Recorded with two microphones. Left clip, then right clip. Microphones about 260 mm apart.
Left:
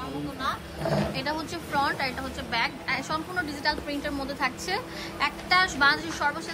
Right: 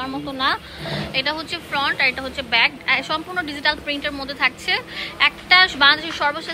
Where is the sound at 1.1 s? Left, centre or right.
Centre.